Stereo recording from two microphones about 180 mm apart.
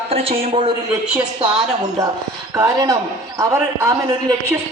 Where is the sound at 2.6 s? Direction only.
20° right (ahead or behind).